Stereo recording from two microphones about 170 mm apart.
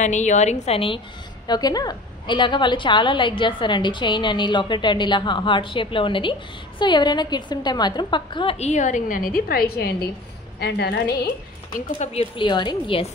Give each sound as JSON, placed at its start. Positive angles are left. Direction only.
{"t": 0.0, "sound": "a woman's voice", "side_deg": 45}
{"t": 10.6, "sound": "a woman's voice", "side_deg": 80}
{"t": 12.0, "sound": "speech", "side_deg": 40}